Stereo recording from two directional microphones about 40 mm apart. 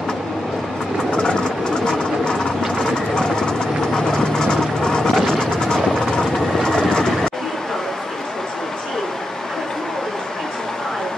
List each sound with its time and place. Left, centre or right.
1.1 s vehicle: left